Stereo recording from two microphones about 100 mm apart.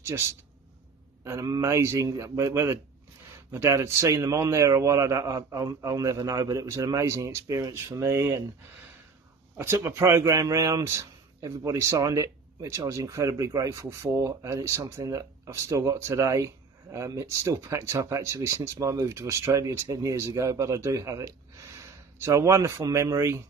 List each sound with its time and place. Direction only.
0.0 s a man's voice: 30° right (ahead or behind)
9.6 s a man's voice: 25° right (ahead or behind)